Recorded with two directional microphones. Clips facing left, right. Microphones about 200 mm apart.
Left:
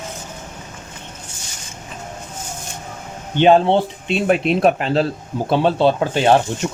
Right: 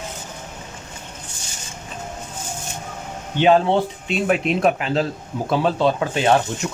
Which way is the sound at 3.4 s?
25° left (ahead or behind).